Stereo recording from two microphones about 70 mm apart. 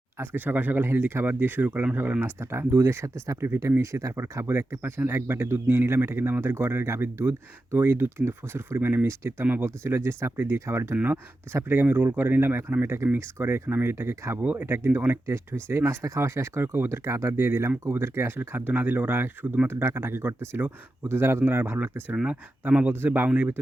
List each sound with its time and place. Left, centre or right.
0.2 s speech: right
2.4 s speech: right
10.9 s speech: right
11.5 s speech: right
14.3 s speech: right
22.1 s speech: centre
22.9 s speech: right